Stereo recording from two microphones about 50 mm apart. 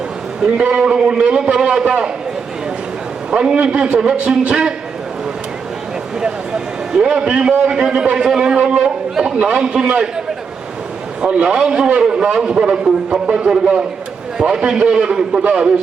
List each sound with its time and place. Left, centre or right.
0.6 s a man's voice: centre
3.3 s a man's voice: centre
6.9 s a man's voice: centre
11.4 s a man's voice: centre